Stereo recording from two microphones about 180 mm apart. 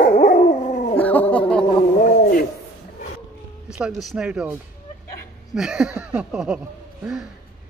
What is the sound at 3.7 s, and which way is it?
Speech, 5° right (ahead or behind).